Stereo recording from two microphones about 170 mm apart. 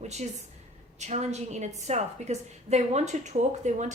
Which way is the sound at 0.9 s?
40° right (ahead or behind).